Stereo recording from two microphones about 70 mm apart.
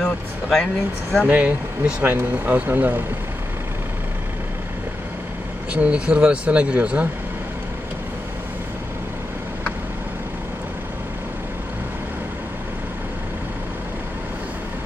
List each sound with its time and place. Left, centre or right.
0.0 s speech: centre
1.2 s speech: centre
5.7 s speech: centre